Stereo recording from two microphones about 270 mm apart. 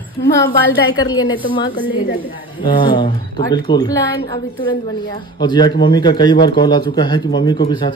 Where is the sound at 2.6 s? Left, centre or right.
Centre.